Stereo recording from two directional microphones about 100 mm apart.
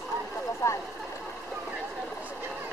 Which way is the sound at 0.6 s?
30° left (ahead or behind).